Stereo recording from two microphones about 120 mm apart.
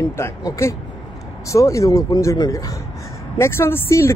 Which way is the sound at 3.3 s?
20° left (ahead or behind).